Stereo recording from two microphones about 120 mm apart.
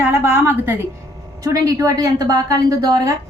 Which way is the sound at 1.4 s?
30° right (ahead or behind).